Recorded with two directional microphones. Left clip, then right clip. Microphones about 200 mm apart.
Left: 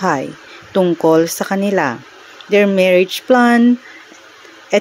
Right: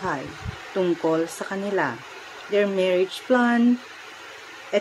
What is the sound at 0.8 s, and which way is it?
Speech, 40° left (ahead or behind).